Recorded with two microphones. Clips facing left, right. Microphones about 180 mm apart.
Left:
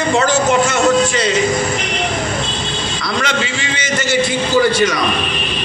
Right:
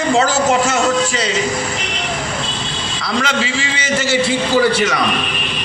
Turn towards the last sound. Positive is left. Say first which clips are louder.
# even
turn(degrees=-30)  # may be behind; listen again after turning